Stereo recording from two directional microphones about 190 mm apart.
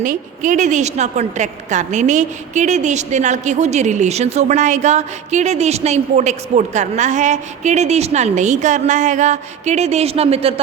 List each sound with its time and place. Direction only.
0.0 s a woman's voice: 45° right (ahead or behind)